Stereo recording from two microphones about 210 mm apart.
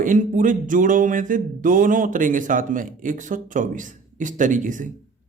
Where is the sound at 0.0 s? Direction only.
40° right (ahead or behind).